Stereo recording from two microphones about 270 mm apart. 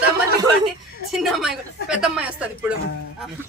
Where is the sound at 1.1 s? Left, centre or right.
Centre.